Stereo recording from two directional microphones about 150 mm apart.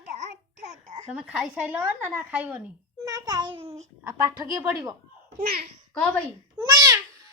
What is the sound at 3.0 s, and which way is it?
Speech, 25° right (ahead or behind).